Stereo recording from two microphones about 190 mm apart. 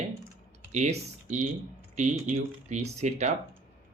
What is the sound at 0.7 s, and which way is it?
Speech, 40° right (ahead or behind).